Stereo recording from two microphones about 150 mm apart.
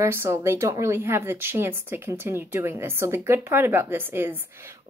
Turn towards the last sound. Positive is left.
turn(degrees=-15)  # may be behind; listen again after turning